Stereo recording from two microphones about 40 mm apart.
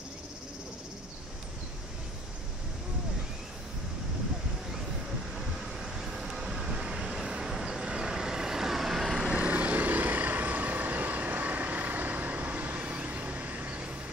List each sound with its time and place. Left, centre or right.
5.6 s vehicle: centre
9.3 s vehicle: right